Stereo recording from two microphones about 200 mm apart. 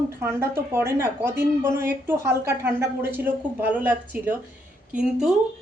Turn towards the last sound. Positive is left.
turn(degrees=-5)  # may be behind; listen again after turning